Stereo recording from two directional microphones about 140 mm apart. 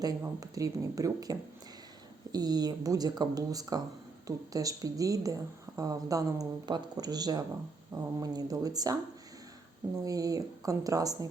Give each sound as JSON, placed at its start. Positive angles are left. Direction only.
{"t": 0.2, "sound": "a woman's voice", "side_deg": -25}
{"t": 10.0, "sound": "a woman's voice", "side_deg": -25}